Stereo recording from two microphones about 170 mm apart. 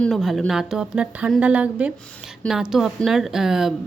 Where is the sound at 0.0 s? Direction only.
Centre (ahead or behind).